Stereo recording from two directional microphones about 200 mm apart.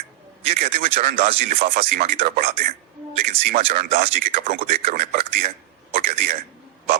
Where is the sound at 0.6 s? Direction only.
45° right (ahead or behind).